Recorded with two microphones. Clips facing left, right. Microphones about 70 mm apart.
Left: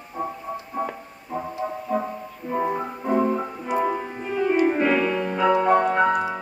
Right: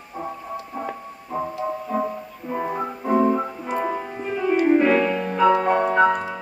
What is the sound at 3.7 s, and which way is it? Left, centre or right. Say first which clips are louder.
Music: left 4 dB; centre.